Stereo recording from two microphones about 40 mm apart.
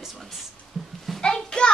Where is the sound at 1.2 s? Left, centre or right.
Left.